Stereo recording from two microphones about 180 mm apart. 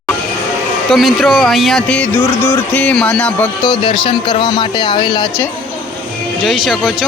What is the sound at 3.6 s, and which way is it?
Speech, 25° left (ahead or behind).